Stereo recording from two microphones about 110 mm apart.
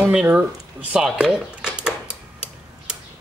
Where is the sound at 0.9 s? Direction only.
5° right (ahead or behind).